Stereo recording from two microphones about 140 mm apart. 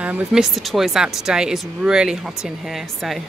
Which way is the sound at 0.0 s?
5° right (ahead or behind).